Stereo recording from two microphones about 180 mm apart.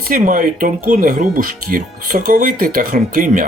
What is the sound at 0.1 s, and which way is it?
Speech, 50° right (ahead or behind).